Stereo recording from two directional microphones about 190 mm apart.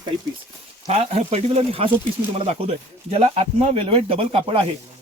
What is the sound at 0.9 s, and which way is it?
Speech, 35° right (ahead or behind).